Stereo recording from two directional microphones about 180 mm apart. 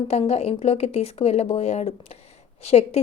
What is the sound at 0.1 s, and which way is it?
Speech, 35° left (ahead or behind).